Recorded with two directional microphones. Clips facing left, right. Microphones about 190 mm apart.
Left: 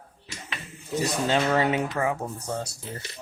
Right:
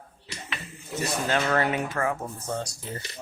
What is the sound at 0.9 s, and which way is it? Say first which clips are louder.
A man's voice: left 2 dB; 15° left (ahead or behind).